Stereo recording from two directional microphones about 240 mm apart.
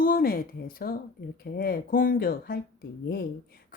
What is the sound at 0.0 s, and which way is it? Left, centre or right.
A woman's voice, left.